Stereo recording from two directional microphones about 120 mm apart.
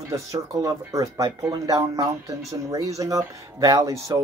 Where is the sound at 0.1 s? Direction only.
25° right (ahead or behind).